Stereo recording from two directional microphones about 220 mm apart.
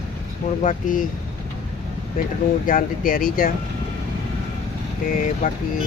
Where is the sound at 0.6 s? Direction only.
35° left (ahead or behind).